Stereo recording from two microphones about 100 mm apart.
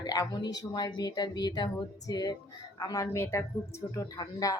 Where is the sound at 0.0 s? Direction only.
40° left (ahead or behind).